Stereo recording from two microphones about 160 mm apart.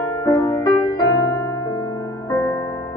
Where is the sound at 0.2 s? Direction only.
25° left (ahead or behind).